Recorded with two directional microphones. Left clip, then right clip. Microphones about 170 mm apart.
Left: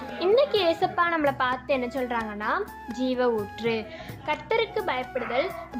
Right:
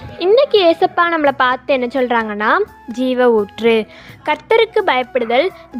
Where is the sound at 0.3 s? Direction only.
45° right (ahead or behind).